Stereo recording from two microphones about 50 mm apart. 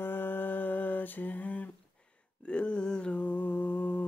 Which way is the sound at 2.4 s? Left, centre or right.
Left.